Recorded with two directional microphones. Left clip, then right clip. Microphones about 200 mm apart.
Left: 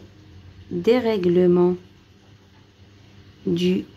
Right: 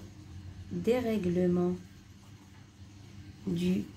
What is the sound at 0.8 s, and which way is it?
Speech, 45° left (ahead or behind).